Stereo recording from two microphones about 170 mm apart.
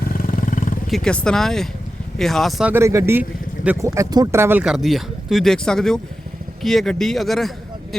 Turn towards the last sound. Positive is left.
turn(degrees=0)  # may be behind; listen again after turning